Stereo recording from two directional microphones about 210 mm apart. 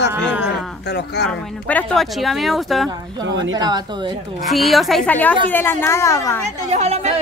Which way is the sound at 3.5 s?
20° right (ahead or behind).